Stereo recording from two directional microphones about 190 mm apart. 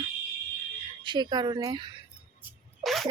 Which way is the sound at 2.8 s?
Centre (ahead or behind).